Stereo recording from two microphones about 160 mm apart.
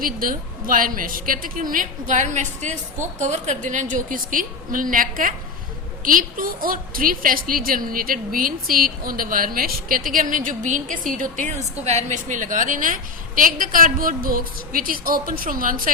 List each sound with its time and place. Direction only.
0.0 s a woman's voice: 60° right (ahead or behind)